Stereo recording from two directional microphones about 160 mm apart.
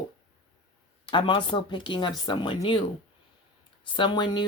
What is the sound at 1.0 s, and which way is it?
Speech, 30° left (ahead or behind).